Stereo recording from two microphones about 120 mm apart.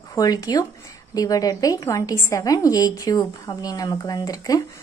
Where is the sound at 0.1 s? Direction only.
30° left (ahead or behind).